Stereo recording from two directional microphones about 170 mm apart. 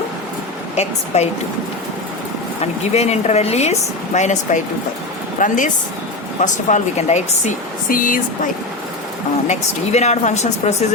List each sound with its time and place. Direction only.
0.8 s speech: 40° left (ahead or behind)
2.6 s speech: 40° left (ahead or behind)
9.5 s speech: 40° left (ahead or behind)